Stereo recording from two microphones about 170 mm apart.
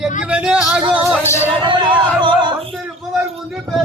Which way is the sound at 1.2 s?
15° left (ahead or behind).